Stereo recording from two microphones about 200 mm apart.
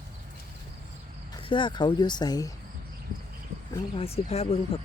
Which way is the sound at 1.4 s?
25° left (ahead or behind).